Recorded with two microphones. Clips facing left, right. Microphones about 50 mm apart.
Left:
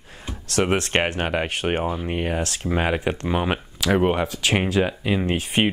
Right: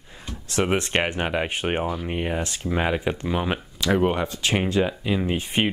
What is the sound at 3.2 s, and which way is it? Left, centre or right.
Speech, centre.